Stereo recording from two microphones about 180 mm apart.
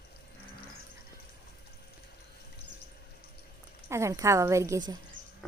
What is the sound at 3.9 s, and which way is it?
A woman's voice, 15° right (ahead or behind).